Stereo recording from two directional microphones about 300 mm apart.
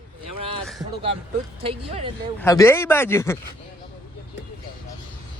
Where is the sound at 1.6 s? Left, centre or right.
Centre.